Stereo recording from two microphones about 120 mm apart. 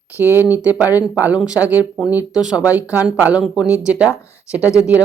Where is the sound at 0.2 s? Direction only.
15° right (ahead or behind).